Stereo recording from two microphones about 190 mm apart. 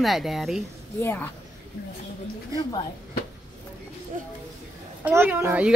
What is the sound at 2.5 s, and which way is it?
Speech, 15° right (ahead or behind).